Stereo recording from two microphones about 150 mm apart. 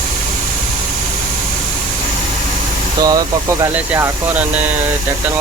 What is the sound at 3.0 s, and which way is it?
Speech, 25° right (ahead or behind).